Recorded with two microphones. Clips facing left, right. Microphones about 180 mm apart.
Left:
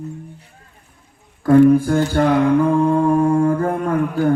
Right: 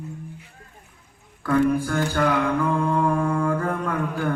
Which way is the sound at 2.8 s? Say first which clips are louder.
Left 7 dB; 40° left (ahead or behind).